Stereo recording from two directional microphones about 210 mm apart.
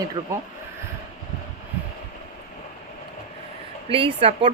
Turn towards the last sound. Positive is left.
turn(degrees=-25)  # may be behind; listen again after turning